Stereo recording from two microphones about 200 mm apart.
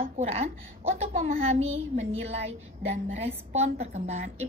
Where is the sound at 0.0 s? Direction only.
30° right (ahead or behind).